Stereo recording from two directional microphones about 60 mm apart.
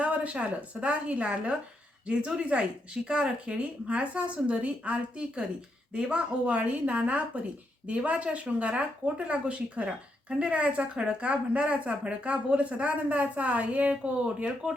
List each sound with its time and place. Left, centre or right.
0.0 s speech: right